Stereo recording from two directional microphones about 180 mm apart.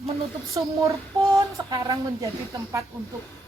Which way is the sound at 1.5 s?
20° right (ahead or behind).